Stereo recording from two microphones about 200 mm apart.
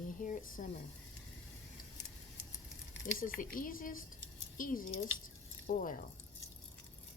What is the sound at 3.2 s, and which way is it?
Speech, 45° left (ahead or behind).